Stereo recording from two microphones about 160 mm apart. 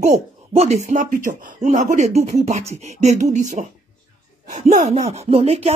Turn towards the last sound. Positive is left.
turn(degrees=-40)  # may be behind; listen again after turning